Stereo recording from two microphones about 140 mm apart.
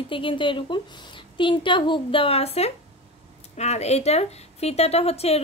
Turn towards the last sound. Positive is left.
turn(degrees=45)  # may be behind; listen again after turning